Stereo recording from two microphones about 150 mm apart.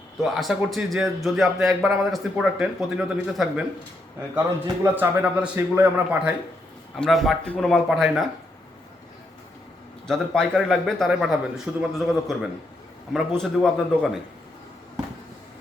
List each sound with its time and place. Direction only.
0.2 s speech: centre (ahead or behind)
4.8 s a man's voice: 10° right (ahead or behind)
6.9 s speech: centre (ahead or behind)
10.1 s speech: 5° left (ahead or behind)